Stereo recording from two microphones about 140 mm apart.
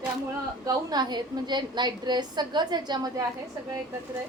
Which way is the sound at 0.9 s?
30° right (ahead or behind).